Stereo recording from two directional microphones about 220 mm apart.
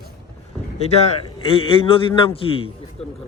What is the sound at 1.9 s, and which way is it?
Speech, 25° left (ahead or behind).